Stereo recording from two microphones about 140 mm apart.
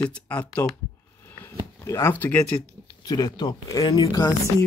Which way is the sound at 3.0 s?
30° left (ahead or behind).